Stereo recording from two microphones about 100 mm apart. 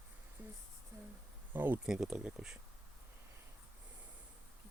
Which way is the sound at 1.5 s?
20° right (ahead or behind).